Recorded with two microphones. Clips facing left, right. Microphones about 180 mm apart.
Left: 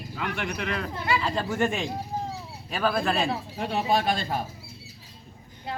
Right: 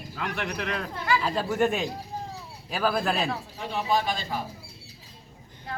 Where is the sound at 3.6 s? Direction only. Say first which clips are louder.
Left 1 dB; 55° left (ahead or behind).